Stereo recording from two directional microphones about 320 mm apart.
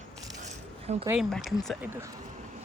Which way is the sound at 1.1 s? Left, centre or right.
Centre.